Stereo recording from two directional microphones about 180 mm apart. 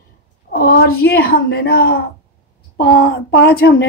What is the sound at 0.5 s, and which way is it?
Speech, 55° left (ahead or behind).